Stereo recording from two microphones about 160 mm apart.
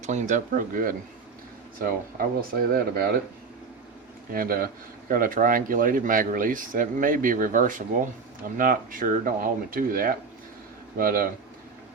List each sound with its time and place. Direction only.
0.0 s speech: 45° right (ahead or behind); by 3.2 s 70° right (ahead or behind)
4.3 s speech: 65° right (ahead or behind)